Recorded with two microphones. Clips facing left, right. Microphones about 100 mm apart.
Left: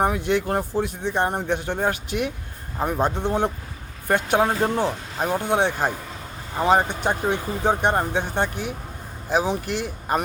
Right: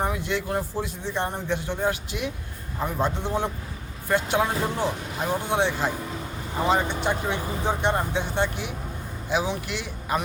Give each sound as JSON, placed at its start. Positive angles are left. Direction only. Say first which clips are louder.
{"t": 0.0, "sound": "a man's voice", "louder": "left 5 dB", "side_deg": 55}